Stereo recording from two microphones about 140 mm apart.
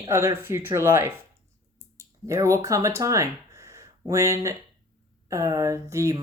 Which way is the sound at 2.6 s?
20° right (ahead or behind).